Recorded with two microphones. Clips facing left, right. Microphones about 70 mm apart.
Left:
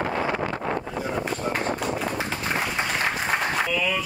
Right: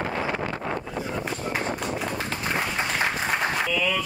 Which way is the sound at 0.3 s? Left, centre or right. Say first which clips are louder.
Left 2 dB; left.